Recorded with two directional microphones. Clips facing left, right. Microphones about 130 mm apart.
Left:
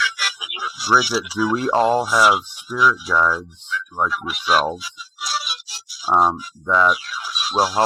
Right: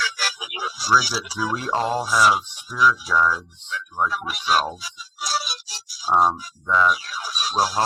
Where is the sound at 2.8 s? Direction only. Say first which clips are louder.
Left 1 dB; 5° left (ahead or behind).